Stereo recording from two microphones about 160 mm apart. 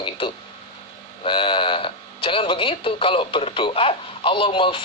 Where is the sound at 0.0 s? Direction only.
30° left (ahead or behind).